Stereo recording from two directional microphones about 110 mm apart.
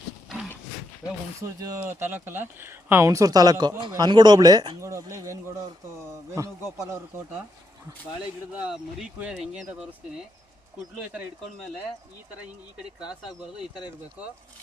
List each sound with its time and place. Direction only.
1.0 s speech: 30° left (ahead or behind)
1.6 s speech: 30° right (ahead or behind)
2.0 s speech: 20° right (ahead or behind); by 4.8 s 40° right (ahead or behind)
4.8 s speech: 25° right (ahead or behind)
8.5 s speech: 5° right (ahead or behind)
13.1 s speech: 10° right (ahead or behind)